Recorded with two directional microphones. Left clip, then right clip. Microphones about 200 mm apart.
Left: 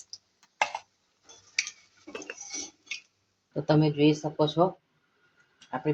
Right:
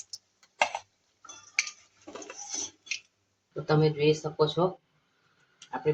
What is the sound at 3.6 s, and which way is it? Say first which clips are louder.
Speech: even; 40° left (ahead or behind).